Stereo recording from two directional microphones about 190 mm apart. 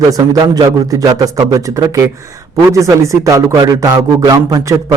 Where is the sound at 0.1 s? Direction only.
20° right (ahead or behind).